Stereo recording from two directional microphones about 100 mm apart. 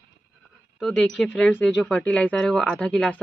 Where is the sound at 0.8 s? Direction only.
5° left (ahead or behind).